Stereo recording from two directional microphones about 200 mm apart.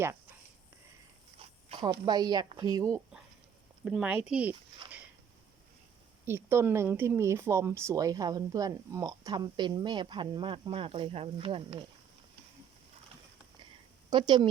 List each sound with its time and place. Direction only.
1.4 s zipper: 25° right (ahead or behind)
2.6 s speech: 20° right (ahead or behind)
6.2 s speech: 10° right (ahead or behind); by 11.9 s 25° right (ahead or behind)
14.1 s speech: 20° right (ahead or behind)